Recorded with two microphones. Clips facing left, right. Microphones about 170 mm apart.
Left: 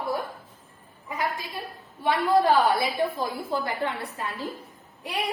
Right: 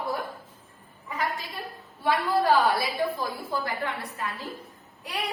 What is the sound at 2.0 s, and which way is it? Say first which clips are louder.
A woman's voice: left 3 dB; 20° left (ahead or behind).